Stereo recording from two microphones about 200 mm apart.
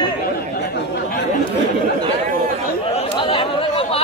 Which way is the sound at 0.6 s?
50° left (ahead or behind).